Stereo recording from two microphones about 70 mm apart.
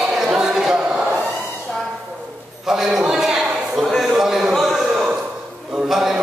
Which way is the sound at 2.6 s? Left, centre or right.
Centre.